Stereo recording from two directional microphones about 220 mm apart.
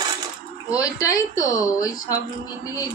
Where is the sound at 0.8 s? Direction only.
15° left (ahead or behind).